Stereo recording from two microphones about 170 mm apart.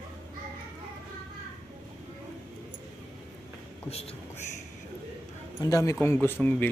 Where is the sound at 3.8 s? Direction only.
35° left (ahead or behind).